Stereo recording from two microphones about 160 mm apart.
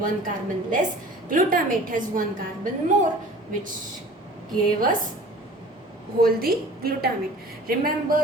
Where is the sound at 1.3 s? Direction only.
60° right (ahead or behind).